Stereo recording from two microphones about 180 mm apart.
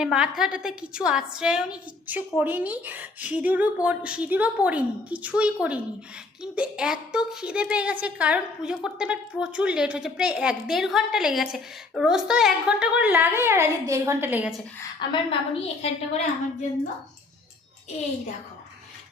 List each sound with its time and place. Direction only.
0.0 s a woman's voice: 5° right (ahead or behind)
15.3 s a woman's voice: 35° left (ahead or behind)